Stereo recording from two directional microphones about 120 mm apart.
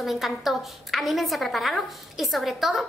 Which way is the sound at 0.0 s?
Centre (ahead or behind).